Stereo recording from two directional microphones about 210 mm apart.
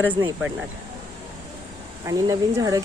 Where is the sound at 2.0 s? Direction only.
15° right (ahead or behind).